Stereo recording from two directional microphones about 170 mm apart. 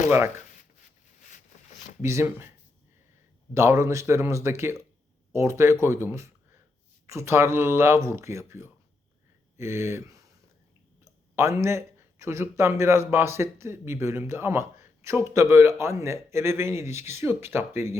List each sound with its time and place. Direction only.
0.1 s speech: 15° right (ahead or behind)
2.0 s speech: 15° right (ahead or behind)
3.5 s speech: 15° right (ahead or behind)